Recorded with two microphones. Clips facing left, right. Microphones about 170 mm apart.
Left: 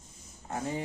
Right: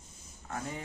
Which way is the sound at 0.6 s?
30° left (ahead or behind).